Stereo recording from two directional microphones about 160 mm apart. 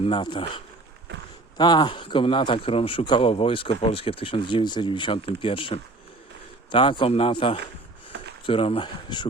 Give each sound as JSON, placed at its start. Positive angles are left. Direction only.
{"t": 0.0, "sound": "a man's voice", "side_deg": 30}